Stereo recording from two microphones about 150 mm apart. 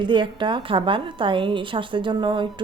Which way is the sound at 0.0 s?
30° right (ahead or behind).